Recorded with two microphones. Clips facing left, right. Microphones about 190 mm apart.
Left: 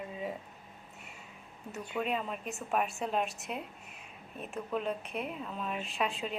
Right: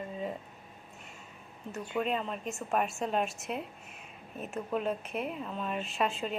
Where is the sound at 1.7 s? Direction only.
Centre (ahead or behind).